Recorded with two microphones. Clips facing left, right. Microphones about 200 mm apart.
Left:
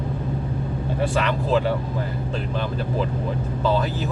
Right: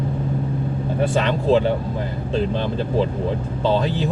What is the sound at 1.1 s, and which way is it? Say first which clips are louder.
Speech: right 5 dB; 30° right (ahead or behind).